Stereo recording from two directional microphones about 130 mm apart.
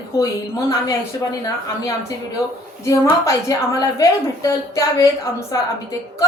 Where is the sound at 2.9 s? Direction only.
25° left (ahead or behind).